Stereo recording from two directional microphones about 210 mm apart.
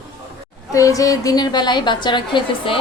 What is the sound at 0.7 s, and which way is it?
A woman's voice, 15° left (ahead or behind).